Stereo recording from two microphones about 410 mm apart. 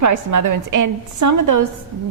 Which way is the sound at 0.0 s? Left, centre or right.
Right.